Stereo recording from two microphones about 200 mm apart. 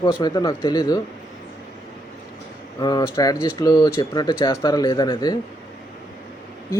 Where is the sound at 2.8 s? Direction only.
20° left (ahead or behind).